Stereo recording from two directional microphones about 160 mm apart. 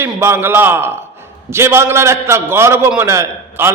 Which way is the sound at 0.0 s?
15° right (ahead or behind).